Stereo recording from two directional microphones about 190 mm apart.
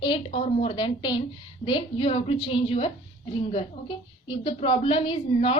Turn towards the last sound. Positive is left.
turn(degrees=30)  # may be behind; listen again after turning